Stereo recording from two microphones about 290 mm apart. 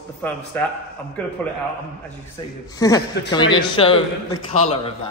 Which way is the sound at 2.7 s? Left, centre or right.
Centre.